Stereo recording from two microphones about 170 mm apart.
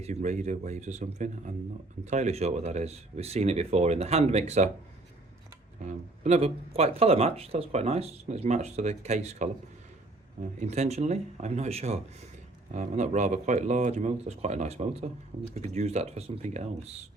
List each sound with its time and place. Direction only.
0.0 s speech: 45° right (ahead or behind)
5.9 s speech: 40° right (ahead or behind)
10.6 s speech: 40° right (ahead or behind)